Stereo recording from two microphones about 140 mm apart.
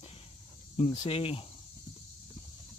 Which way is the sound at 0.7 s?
45° left (ahead or behind).